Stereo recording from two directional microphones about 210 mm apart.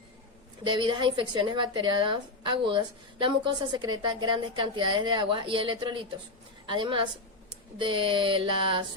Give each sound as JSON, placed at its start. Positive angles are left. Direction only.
{"t": 0.6, "sound": "speech", "side_deg": -20}